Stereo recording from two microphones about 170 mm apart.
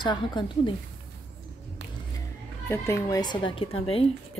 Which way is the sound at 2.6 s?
15° left (ahead or behind).